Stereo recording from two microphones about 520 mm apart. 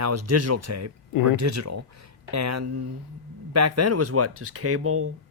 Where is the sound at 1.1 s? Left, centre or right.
Left.